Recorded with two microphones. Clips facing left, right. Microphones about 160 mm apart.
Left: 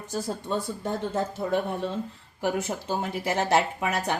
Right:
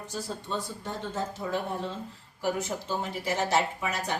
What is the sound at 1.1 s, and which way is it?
A woman's voice, 60° left (ahead or behind).